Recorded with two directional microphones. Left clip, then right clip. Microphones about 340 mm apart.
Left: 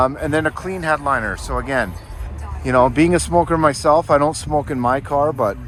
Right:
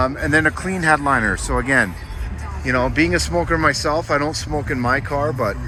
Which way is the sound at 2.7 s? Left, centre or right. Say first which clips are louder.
Left 4 dB; centre.